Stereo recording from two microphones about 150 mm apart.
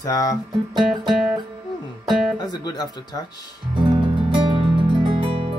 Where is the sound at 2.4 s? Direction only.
25° left (ahead or behind).